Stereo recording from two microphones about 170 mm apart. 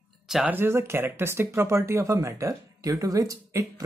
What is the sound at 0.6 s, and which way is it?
Speech, 15° right (ahead or behind).